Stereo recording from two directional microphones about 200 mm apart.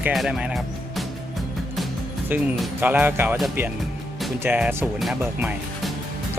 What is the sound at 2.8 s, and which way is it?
Speech, 10° right (ahead or behind).